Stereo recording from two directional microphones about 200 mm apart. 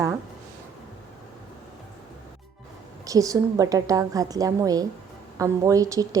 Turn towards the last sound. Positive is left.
turn(degrees=-15)  # may be behind; listen again after turning